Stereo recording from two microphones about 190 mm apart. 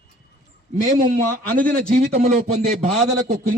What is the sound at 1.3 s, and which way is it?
Speech, 45° right (ahead or behind).